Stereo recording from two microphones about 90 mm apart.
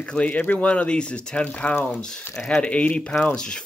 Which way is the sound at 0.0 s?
15° left (ahead or behind).